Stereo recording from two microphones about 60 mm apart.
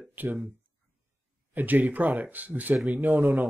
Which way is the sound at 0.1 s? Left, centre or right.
Right.